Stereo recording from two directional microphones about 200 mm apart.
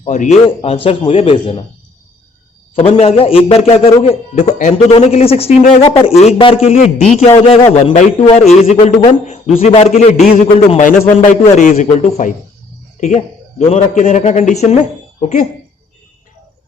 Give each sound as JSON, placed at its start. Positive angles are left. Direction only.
{"t": 0.0, "sound": "a man's voice", "side_deg": 35}
{"t": 2.7, "sound": "a man's voice", "side_deg": 30}